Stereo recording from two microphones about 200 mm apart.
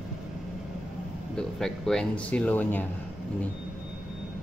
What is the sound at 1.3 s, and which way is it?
Speech, centre (ahead or behind).